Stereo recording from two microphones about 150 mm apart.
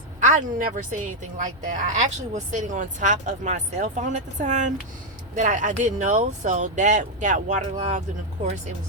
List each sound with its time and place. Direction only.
0.2 s speech: 55° right (ahead or behind)